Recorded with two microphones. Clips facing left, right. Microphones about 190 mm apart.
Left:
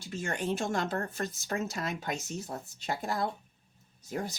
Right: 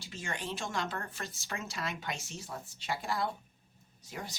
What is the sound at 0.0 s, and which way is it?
Speech, 50° left (ahead or behind).